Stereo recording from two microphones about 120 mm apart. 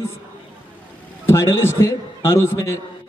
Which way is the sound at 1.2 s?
25° left (ahead or behind).